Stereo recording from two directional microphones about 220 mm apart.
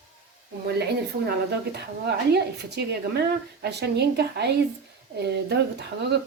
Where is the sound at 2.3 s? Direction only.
50° right (ahead or behind).